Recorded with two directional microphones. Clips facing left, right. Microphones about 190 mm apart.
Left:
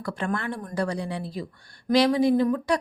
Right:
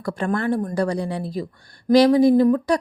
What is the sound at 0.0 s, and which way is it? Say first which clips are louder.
Speech: right 6 dB; 40° right (ahead or behind).